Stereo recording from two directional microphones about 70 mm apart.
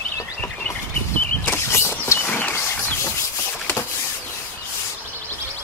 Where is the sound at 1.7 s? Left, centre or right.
Left.